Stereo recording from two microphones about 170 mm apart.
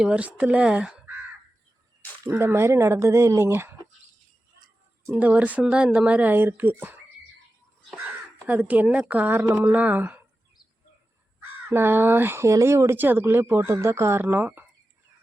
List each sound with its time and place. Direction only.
0.0 s speech: 5° right (ahead or behind)
2.2 s speech: 15° right (ahead or behind)
5.0 s speech: 10° right (ahead or behind)
8.4 s speech: 10° right (ahead or behind)
11.3 s speech: 15° right (ahead or behind)